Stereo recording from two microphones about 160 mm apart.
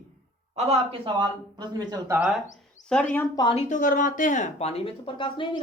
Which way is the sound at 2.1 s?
5° right (ahead or behind).